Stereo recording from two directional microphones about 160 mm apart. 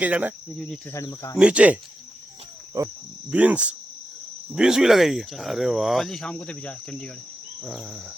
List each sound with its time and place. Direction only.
0.0 s cricket: 10° right (ahead or behind)
0.5 s speech: 5° left (ahead or behind)
0.9 s speech: 20° left (ahead or behind)
1.4 s cricket: 5° right (ahead or behind)
2.8 s insect: 20° right (ahead or behind)
3.2 s cricket: 10° right (ahead or behind)
4.5 s speech: 5° right (ahead or behind)